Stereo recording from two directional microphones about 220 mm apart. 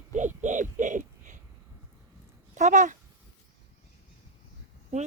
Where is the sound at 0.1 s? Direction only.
35° right (ahead or behind).